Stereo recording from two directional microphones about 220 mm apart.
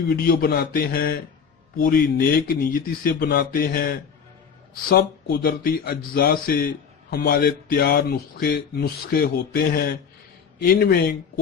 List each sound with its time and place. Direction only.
0.1 s a man's voice: 45° left (ahead or behind)